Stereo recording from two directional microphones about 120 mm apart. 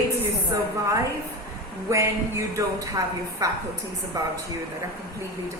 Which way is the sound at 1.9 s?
25° right (ahead or behind).